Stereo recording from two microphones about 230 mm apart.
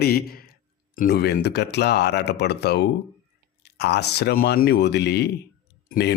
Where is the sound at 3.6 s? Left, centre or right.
Left.